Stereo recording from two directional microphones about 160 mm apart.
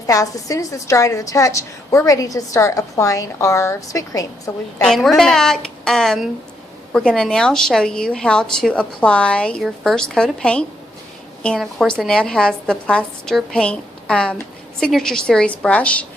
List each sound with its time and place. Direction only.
0.1 s a woman's voice: 20° left (ahead or behind)
4.8 s a woman's voice: centre (ahead or behind)